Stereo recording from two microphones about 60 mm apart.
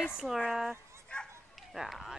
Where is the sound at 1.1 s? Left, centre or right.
Centre.